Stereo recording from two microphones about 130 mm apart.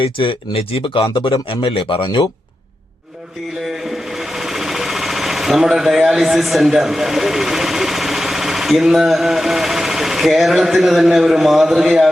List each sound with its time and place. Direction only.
0.0 s speech: 40° left (ahead or behind)
4.4 s sewing machine: 5° right (ahead or behind)